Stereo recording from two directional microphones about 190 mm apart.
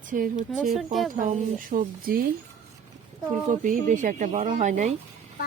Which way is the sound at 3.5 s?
40° right (ahead or behind).